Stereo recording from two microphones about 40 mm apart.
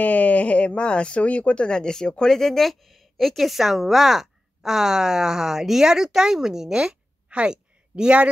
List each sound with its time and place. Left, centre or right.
0.0 s speech: left; by 7.0 s centre
7.2 s a sound: right
7.9 s speech: right